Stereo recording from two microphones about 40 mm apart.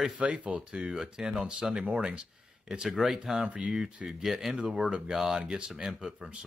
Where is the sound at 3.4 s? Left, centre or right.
Right.